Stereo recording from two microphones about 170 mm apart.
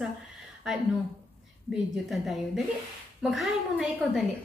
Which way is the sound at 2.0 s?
Centre (ahead or behind).